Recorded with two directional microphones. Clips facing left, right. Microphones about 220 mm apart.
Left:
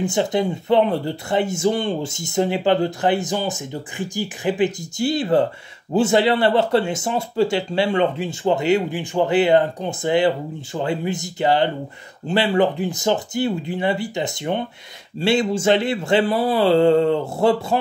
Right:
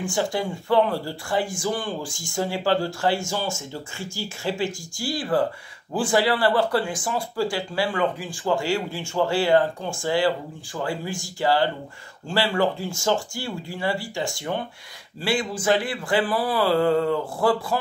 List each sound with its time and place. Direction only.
0.0 s speech: 20° left (ahead or behind)